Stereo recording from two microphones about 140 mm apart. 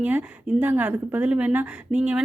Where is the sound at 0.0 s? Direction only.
10° right (ahead or behind).